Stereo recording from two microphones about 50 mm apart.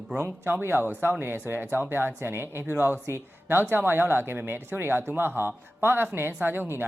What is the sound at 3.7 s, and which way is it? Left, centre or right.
Speech, right.